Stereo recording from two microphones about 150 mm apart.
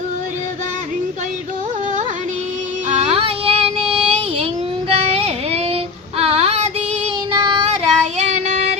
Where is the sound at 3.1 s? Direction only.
40° right (ahead or behind).